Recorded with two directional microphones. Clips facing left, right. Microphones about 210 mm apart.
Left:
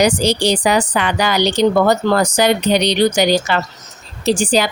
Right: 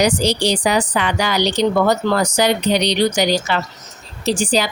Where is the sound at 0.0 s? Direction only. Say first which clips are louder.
Left 2 dB; 50° left (ahead or behind).